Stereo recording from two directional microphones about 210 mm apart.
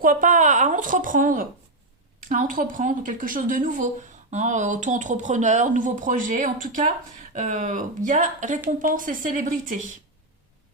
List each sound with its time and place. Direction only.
0.0 s speech: 40° right (ahead or behind)